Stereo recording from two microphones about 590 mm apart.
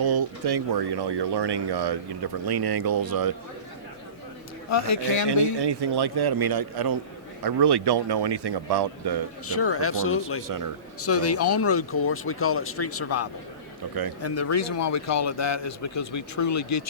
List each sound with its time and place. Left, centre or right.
0.0 s speech: right
4.7 s a man's voice: left
5.5 s speech: right
9.5 s a man's voice: left